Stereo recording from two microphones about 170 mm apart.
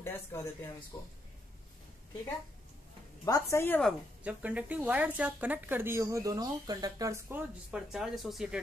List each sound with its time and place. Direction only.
0.0 s speech: 15° left (ahead or behind)
3.3 s a woman's voice: 20° left (ahead or behind)
3.8 s a woman's voice: 10° right (ahead or behind)
7.7 s speech: 5° right (ahead or behind)